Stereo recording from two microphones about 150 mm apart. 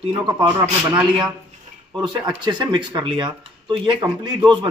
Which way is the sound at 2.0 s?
30° right (ahead or behind).